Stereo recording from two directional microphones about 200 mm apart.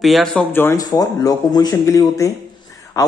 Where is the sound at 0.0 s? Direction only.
Centre (ahead or behind).